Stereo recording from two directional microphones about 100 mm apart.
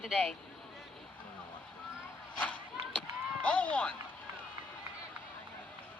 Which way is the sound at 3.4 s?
10° left (ahead or behind).